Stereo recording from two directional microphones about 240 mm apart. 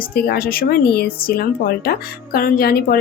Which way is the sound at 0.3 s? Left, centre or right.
Left.